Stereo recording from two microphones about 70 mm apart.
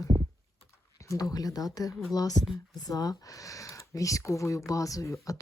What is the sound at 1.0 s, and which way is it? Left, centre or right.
Speech, left.